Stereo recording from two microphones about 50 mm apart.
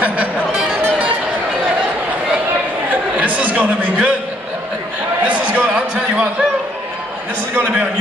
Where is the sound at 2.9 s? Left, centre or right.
Right.